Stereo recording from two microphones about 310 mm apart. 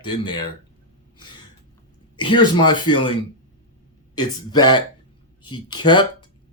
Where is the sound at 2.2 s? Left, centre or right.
Centre.